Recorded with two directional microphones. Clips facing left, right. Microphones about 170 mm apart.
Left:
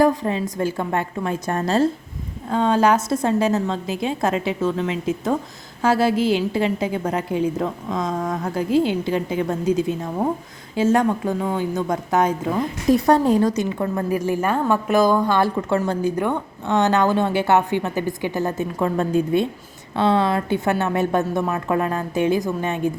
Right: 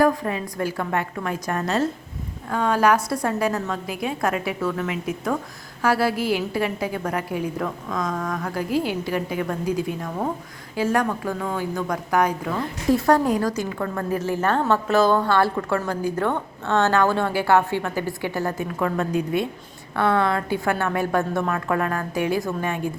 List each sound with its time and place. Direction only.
0.0 s a woman's voice: 20° left (ahead or behind)